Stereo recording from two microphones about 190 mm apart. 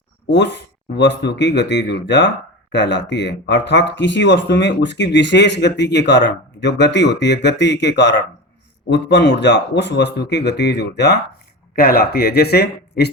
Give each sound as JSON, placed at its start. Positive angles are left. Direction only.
{"t": 0.3, "sound": "a man's voice", "side_deg": 65}